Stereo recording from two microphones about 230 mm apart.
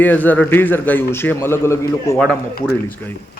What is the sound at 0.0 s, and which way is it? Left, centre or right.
Speech, centre.